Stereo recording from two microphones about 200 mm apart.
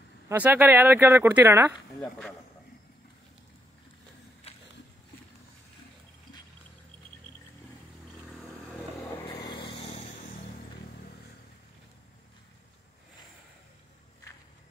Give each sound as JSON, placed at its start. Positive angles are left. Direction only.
{"t": 0.3, "sound": "speech", "side_deg": -10}
{"t": 2.0, "sound": "speech", "side_deg": 5}
{"t": 4.5, "sound": "a sound", "side_deg": 30}
{"t": 9.3, "sound": "vehicle", "side_deg": 20}